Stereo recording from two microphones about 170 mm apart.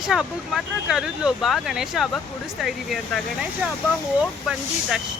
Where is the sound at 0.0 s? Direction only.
5° right (ahead or behind).